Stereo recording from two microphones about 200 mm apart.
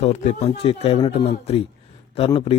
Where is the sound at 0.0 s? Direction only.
35° left (ahead or behind).